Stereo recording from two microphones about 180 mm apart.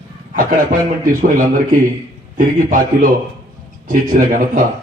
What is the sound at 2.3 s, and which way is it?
Speech, 50° right (ahead or behind).